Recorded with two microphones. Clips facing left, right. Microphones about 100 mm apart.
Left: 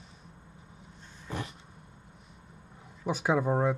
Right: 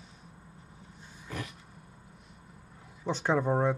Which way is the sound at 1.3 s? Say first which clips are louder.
Left 2 dB; 30° left (ahead or behind).